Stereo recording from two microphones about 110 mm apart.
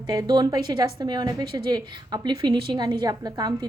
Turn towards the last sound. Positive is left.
turn(degrees=-40)  # may be behind; listen again after turning